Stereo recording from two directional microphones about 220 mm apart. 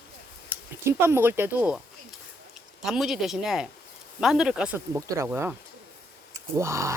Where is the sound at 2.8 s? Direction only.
Centre (ahead or behind).